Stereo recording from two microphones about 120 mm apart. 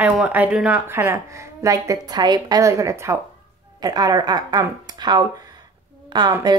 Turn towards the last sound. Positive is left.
turn(degrees=-40)  # may be behind; listen again after turning